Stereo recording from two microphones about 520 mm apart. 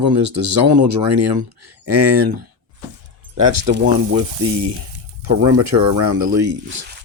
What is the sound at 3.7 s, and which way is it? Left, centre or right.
Speech, centre.